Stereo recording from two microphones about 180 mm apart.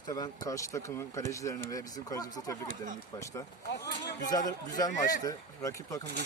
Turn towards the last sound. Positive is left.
turn(degrees=15)  # may be behind; listen again after turning